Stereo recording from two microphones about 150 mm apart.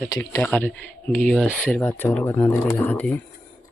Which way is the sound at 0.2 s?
10° left (ahead or behind).